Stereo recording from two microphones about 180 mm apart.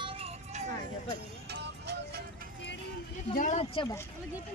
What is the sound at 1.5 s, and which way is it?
Music, 70° right (ahead or behind).